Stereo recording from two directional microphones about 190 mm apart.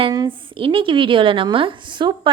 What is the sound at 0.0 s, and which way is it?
A woman's voice, 25° right (ahead or behind).